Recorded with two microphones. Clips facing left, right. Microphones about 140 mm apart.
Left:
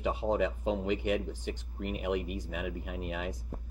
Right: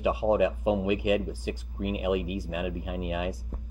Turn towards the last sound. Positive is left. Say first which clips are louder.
# right 6 dB
turn(degrees=-5)  # may be behind; listen again after turning